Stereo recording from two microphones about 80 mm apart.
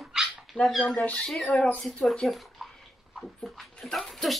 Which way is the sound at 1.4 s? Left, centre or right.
Centre.